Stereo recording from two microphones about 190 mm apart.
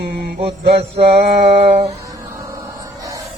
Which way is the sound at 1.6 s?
35° right (ahead or behind).